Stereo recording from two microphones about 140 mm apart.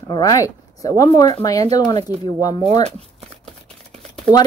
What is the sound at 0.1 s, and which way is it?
Speech, 25° left (ahead or behind).